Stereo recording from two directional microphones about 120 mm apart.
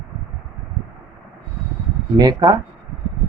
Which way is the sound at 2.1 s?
35° right (ahead or behind).